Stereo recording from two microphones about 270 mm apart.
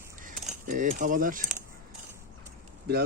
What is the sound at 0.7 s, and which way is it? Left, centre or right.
Speech, right.